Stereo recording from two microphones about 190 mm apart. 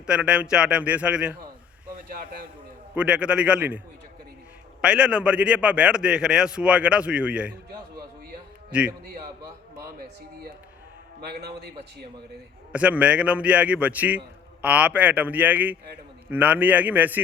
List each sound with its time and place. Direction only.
0.0 s a man's voice: 5° right (ahead or behind)
2.0 s speech: 55° right (ahead or behind)
2.9 s a man's voice: 5° right (ahead or behind)
4.8 s a man's voice: 5° right (ahead or behind)
9.4 s a sound: 15° right (ahead or behind)
11.2 s a man's voice: 60° right (ahead or behind)
12.7 s a man's voice: 5° right (ahead or behind)